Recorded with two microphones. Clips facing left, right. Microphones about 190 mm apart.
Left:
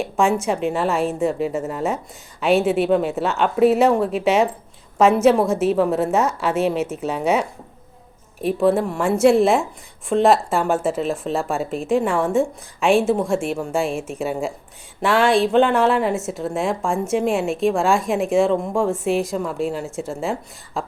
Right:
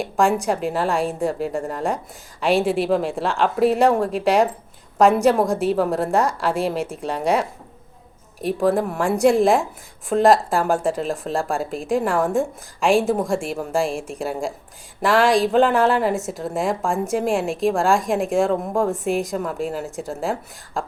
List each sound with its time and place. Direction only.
0.0 s a woman's voice: centre (ahead or behind)